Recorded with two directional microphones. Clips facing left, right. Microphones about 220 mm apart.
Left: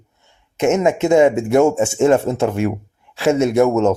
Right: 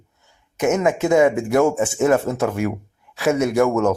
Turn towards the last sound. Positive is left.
turn(degrees=25)  # may be behind; listen again after turning